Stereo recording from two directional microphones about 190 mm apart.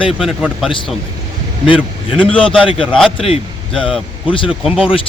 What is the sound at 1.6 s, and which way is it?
Speech, 25° left (ahead or behind).